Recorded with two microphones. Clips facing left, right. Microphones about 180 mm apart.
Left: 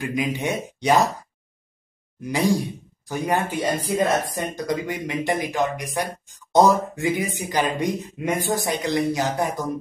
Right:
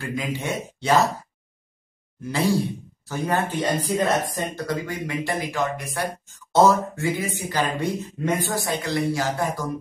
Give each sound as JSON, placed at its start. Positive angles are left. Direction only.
{"t": 0.0, "sound": "speech", "side_deg": 15}
{"t": 2.5, "sound": "speech", "side_deg": 15}